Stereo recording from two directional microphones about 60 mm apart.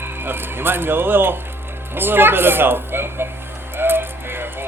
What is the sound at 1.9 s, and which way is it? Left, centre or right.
Music, right.